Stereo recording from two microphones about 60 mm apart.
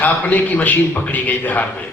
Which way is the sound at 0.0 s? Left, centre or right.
Left.